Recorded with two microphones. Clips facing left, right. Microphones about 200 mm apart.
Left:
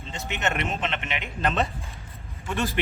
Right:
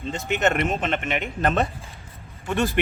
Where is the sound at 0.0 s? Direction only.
50° right (ahead or behind).